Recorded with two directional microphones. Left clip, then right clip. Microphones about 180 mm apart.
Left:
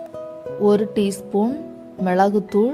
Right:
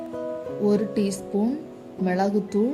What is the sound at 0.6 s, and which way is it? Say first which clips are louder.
A woman's voice: left 6 dB; 40° left (ahead or behind).